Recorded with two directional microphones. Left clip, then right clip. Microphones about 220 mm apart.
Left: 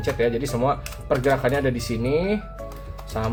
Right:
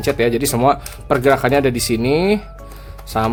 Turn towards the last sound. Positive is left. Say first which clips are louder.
# right 9 dB
turn(degrees=-45)  # may be behind; listen again after turning